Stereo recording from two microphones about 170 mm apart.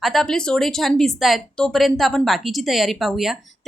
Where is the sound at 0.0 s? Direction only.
Centre (ahead or behind).